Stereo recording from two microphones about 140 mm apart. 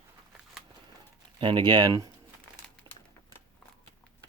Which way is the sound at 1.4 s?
35° right (ahead or behind).